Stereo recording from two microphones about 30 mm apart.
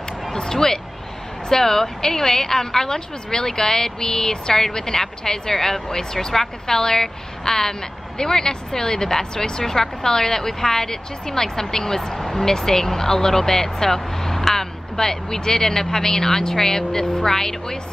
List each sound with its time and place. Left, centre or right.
0.3 s a woman's voice: centre